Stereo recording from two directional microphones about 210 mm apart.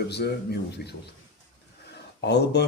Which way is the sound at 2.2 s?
55° left (ahead or behind).